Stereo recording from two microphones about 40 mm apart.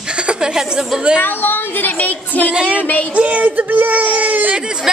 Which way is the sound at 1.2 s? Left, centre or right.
Left.